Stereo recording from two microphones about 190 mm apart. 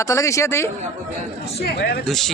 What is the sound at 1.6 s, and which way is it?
Speech, 55° left (ahead or behind).